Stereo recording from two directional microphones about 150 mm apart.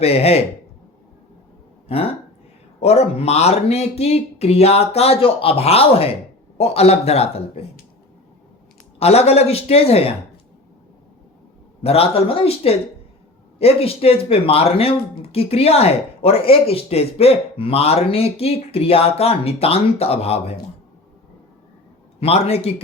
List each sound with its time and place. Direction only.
0.0 s speech: 40° left (ahead or behind)
1.9 s speech: 40° left (ahead or behind)
9.0 s speech: 45° left (ahead or behind)
11.8 s speech: 40° left (ahead or behind)
22.2 s speech: 45° left (ahead or behind)